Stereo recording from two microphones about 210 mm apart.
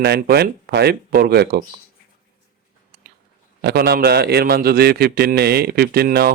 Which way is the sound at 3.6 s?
50° right (ahead or behind).